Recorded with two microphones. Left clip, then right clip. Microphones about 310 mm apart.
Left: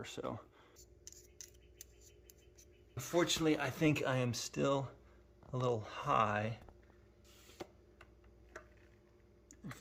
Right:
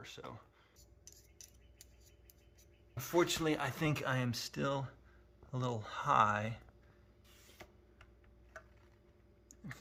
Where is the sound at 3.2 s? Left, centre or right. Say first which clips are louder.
Even; centre.